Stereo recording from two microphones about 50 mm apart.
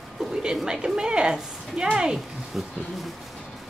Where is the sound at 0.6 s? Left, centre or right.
Centre.